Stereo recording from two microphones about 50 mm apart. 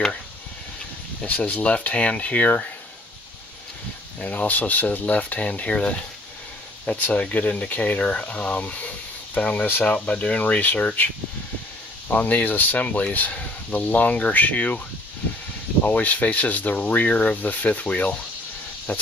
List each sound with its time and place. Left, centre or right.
1.2 s speech: left
4.2 s speech: left
12.1 s speech: left
15.8 s speech: left